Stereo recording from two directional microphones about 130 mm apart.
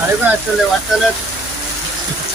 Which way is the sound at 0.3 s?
15° right (ahead or behind).